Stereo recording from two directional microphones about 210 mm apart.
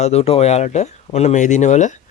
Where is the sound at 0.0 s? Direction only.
30° left (ahead or behind).